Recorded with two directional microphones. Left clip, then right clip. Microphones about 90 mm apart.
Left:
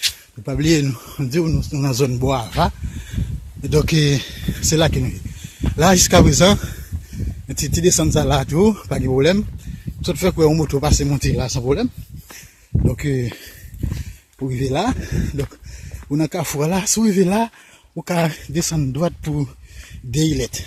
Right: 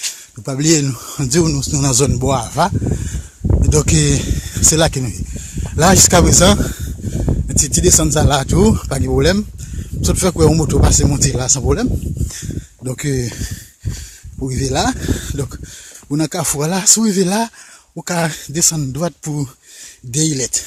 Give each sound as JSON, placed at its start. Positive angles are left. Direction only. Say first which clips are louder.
{"t": 0.4, "sound": "speech", "louder": "right 3 dB", "side_deg": -25}
{"t": 1.0, "sound": "speech", "louder": "right 5 dB", "side_deg": -40}
{"t": 1.3, "sound": "speech", "louder": "right 5 dB", "side_deg": -55}
{"t": 10.0, "sound": "speech", "louder": "right 2 dB", "side_deg": -25}
{"t": 12.9, "sound": "speech", "louder": "right 4 dB", "side_deg": -30}
{"t": 14.4, "sound": "speech", "louder": "right 3 dB", "side_deg": -20}
{"t": 16.6, "sound": "speech", "louder": "right 4 dB", "side_deg": -5}
{"t": 18.6, "sound": "speech", "louder": "right 4 dB", "side_deg": 10}
{"t": 19.2, "sound": "speech", "louder": "right 1 dB", "side_deg": -5}